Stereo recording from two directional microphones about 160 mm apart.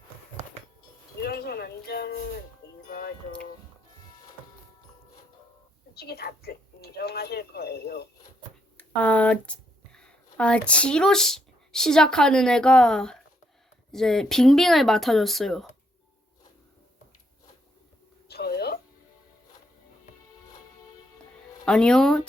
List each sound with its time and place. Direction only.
1.2 s music: 75° left (ahead or behind)
2.8 s music: 65° left (ahead or behind)
5.9 s speech: 90° left
8.8 s speech: 10° left (ahead or behind)
18.3 s a sound: 80° left
21.6 s speech: 5° left (ahead or behind)